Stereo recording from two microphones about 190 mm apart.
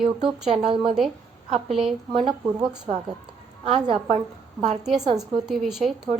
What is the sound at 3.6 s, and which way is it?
Speech, 30° right (ahead or behind).